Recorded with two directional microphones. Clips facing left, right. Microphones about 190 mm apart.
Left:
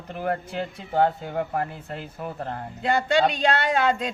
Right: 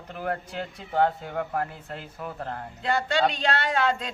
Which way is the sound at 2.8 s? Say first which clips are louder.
Left 3 dB; 15° left (ahead or behind).